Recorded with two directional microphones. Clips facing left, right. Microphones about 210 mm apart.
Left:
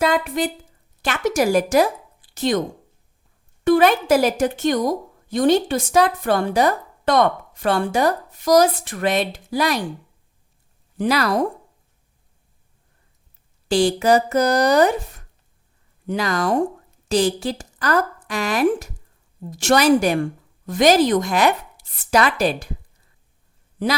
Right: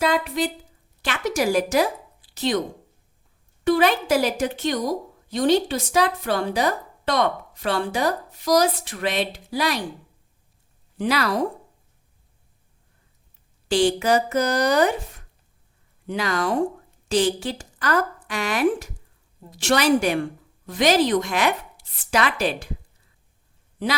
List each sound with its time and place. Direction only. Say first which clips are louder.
0.0 s a woman's voice: left 2 dB; 50° left (ahead or behind)
3.6 s a woman's voice: left 4 dB; 50° left (ahead or behind)
10.9 s speech: left 3 dB; 45° left (ahead or behind)
13.7 s a woman's voice: left 3 dB; 40° left (ahead or behind)
16.0 s a woman's voice: left 3 dB; 40° left (ahead or behind)